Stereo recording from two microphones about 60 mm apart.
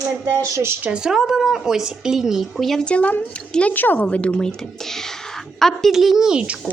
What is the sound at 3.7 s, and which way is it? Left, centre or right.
A woman's voice, left.